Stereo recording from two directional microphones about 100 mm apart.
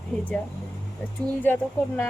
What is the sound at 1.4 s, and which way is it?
Speech, 20° left (ahead or behind).